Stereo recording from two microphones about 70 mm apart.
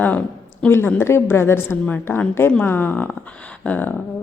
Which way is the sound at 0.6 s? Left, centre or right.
Centre.